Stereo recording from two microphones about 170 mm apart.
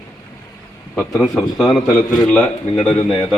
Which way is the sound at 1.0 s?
Centre (ahead or behind).